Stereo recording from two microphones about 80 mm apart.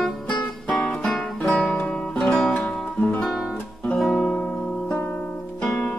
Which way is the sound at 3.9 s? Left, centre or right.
Centre.